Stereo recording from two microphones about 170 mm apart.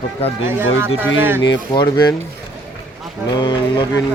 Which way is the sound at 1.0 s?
10° right (ahead or behind).